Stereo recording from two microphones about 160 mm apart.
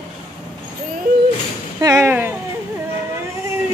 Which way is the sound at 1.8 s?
20° right (ahead or behind).